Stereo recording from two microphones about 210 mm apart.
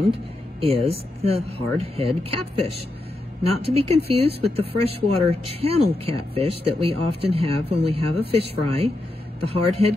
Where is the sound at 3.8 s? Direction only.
30° right (ahead or behind).